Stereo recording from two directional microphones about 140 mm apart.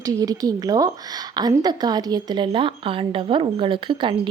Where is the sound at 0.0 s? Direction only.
25° right (ahead or behind).